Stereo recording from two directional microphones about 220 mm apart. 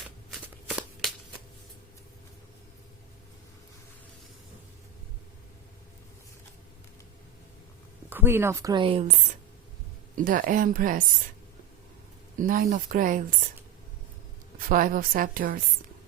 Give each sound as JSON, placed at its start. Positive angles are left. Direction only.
{"t": 0.0, "sound": "shuffling cards", "side_deg": 0}
{"t": 8.1, "sound": "speech", "side_deg": -10}
{"t": 10.2, "sound": "a woman's voice", "side_deg": -40}
{"t": 12.4, "sound": "a woman's voice", "side_deg": -35}
{"t": 14.7, "sound": "a woman's voice", "side_deg": -40}